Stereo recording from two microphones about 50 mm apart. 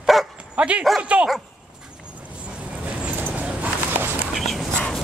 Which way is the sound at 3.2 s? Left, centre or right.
Right.